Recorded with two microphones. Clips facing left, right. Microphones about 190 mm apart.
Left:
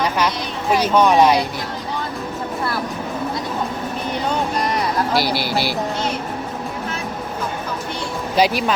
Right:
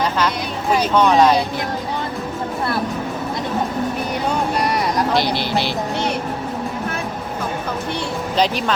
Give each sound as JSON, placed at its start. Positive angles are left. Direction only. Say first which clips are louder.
{"t": 0.8, "sound": "speech", "louder": "even", "side_deg": 15}
{"t": 5.1, "sound": "speech", "louder": "right 1 dB", "side_deg": 5}
{"t": 8.4, "sound": "speech", "louder": "left 2 dB", "side_deg": 10}